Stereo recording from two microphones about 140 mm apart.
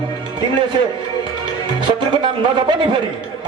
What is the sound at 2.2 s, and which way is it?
Speech, 35° right (ahead or behind).